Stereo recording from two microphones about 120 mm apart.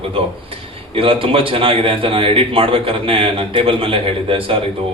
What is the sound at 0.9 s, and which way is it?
A man's voice, 50° right (ahead or behind).